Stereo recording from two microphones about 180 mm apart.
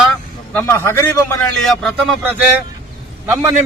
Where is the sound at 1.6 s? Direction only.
Centre (ahead or behind).